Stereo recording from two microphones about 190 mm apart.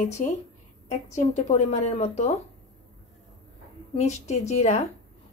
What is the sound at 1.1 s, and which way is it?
A woman's voice, 35° left (ahead or behind).